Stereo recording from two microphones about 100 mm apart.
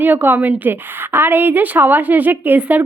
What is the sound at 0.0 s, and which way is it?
A woman's voice, 20° right (ahead or behind).